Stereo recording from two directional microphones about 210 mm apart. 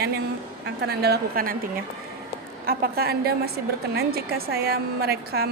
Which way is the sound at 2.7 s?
45° right (ahead or behind).